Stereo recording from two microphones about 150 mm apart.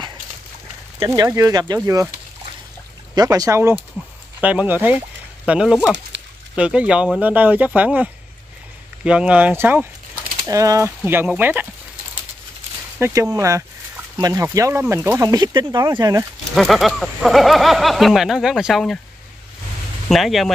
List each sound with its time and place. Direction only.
1.0 s speech: 20° right (ahead or behind)
3.2 s speech: 25° right (ahead or behind)
4.4 s speech: 10° right (ahead or behind)
13.0 s speech: 20° right (ahead or behind)
16.5 s speech: centre (ahead or behind)
20.1 s speech: centre (ahead or behind)